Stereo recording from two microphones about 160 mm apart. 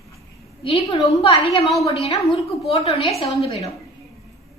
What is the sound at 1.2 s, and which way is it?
Speech, 35° left (ahead or behind).